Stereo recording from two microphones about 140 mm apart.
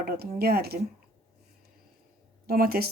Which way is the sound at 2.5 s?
90° right.